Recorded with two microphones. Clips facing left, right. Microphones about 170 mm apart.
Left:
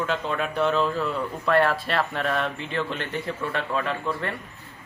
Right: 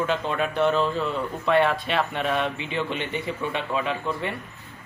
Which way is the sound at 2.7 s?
20° right (ahead or behind).